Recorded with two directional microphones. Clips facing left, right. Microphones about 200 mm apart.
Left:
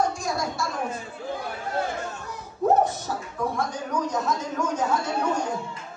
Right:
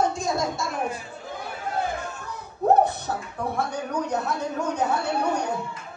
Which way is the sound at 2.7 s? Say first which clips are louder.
Right 3 dB; 60° right (ahead or behind).